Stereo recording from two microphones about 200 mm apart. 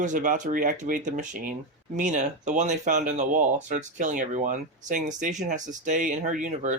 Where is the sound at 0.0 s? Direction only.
40° right (ahead or behind).